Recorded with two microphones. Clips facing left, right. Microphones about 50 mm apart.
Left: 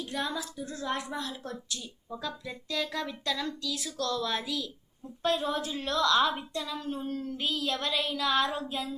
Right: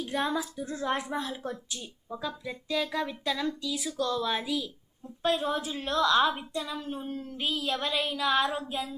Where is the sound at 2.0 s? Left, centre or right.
Centre.